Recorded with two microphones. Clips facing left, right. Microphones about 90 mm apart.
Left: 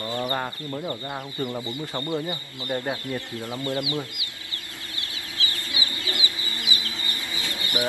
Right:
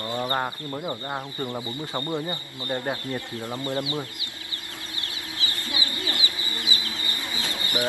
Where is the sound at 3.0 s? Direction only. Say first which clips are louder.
Even; 15° right (ahead or behind).